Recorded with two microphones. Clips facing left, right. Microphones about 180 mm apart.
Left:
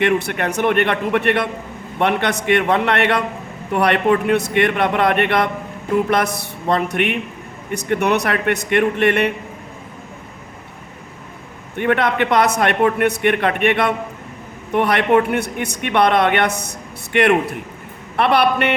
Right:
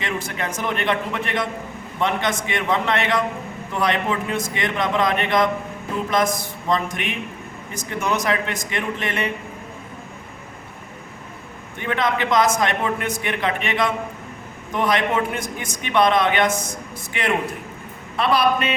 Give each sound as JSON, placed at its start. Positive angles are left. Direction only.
{"t": 0.0, "sound": "a man's voice", "side_deg": 65}
{"t": 11.8, "sound": "a man's voice", "side_deg": 60}